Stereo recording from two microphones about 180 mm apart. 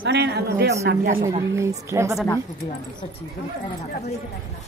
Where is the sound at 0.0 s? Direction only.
70° right (ahead or behind).